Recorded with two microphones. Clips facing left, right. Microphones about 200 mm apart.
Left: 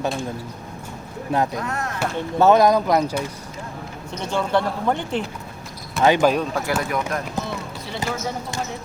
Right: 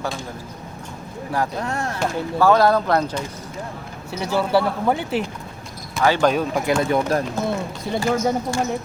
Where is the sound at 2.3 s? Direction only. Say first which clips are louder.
Left 1 dB; 20° left (ahead or behind).